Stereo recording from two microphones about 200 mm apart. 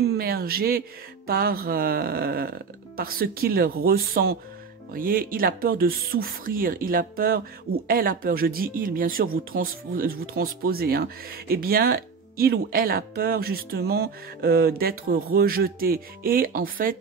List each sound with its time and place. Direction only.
0.2 s speech: 50° right (ahead or behind)